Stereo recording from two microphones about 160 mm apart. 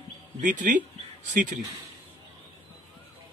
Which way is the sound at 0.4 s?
50° right (ahead or behind).